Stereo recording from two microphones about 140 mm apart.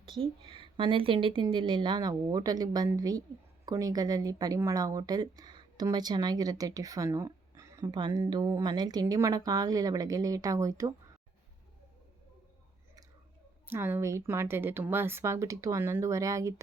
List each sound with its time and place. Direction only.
0.0 s a woman's voice: 40° right (ahead or behind); by 10.9 s 25° right (ahead or behind)
13.7 s speech: 15° right (ahead or behind)